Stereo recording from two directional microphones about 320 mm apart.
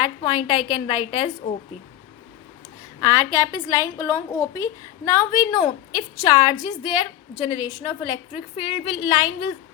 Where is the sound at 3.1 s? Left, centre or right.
Centre.